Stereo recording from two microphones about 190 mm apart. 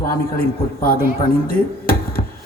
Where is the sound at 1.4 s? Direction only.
50° left (ahead or behind).